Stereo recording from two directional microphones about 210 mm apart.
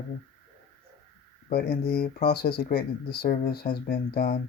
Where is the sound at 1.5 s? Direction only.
45° left (ahead or behind).